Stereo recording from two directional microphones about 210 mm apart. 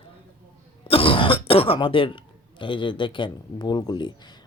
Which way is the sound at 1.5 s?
25° left (ahead or behind).